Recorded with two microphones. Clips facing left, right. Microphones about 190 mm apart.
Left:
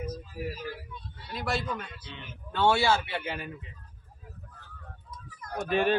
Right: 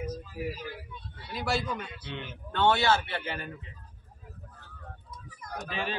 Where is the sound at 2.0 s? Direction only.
60° right (ahead or behind).